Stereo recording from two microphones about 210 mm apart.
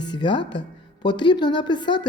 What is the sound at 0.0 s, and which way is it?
A woman's voice, 20° left (ahead or behind).